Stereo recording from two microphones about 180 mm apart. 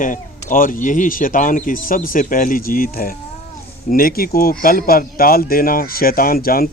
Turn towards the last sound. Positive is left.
turn(degrees=55)  # may be behind; listen again after turning